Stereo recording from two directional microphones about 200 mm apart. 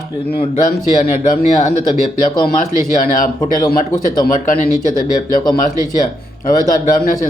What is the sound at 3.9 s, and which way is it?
Speech, 40° left (ahead or behind).